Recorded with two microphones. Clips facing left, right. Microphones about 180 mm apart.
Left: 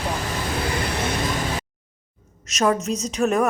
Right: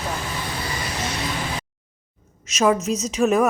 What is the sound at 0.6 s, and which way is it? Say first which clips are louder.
Vehicle: left 5 dB; 60° left (ahead or behind).